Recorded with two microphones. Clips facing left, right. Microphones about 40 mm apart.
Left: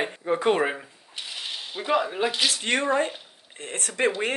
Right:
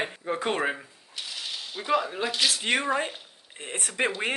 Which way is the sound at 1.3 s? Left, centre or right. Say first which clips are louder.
Left 2 dB; left.